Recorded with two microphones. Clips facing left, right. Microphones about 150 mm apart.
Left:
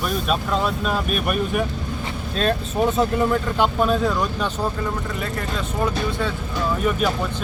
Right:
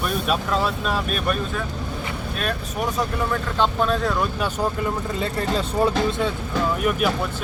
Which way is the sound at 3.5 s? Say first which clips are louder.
Right 1 dB; 10° left (ahead or behind).